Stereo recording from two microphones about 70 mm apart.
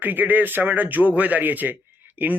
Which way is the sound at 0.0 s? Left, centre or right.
Right.